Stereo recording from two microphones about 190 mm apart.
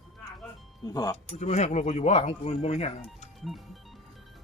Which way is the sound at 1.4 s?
35° left (ahead or behind).